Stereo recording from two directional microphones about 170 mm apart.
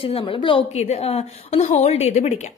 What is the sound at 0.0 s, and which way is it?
A woman's voice, 30° left (ahead or behind).